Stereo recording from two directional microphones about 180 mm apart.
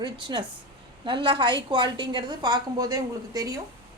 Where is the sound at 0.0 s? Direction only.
25° right (ahead or behind).